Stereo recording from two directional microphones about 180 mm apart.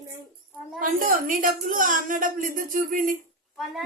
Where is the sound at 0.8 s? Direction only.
50° right (ahead or behind).